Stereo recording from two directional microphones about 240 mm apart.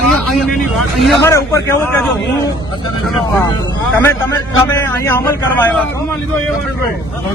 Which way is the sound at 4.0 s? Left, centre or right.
Centre.